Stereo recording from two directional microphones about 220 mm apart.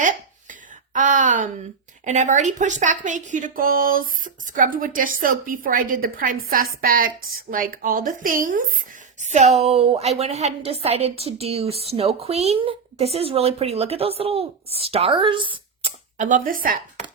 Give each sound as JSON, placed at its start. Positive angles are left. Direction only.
{"t": 0.9, "sound": "a woman's voice", "side_deg": -35}
{"t": 16.1, "sound": "speech", "side_deg": -35}